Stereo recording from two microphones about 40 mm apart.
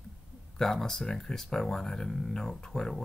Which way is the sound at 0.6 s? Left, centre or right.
Centre.